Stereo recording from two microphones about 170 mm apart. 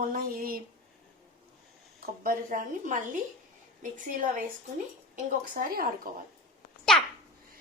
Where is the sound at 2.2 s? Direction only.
55° right (ahead or behind).